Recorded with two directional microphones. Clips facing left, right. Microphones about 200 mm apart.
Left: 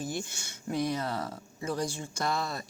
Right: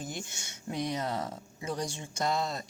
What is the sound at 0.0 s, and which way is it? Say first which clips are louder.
Speech: left 4 dB; 20° right (ahead or behind).